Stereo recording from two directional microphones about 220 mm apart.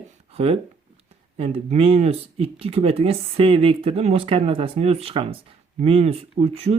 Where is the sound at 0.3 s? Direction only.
25° right (ahead or behind).